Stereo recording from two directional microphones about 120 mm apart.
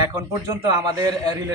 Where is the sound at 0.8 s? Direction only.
30° right (ahead or behind).